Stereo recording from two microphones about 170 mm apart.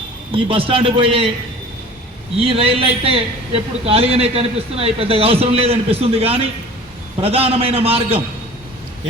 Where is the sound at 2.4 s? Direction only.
35° right (ahead or behind).